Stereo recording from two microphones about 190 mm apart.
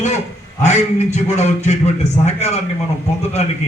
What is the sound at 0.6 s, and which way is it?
A man's voice, 35° left (ahead or behind).